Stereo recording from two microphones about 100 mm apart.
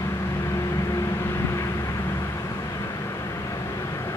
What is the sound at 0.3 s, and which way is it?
Vehicle, 35° left (ahead or behind).